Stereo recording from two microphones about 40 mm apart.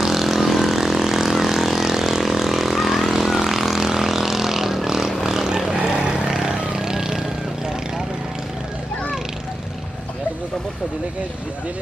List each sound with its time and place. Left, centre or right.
0.0 s vehicle: centre